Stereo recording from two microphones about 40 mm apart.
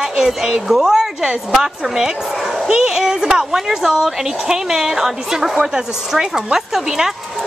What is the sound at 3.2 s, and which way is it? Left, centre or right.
A woman's voice, centre.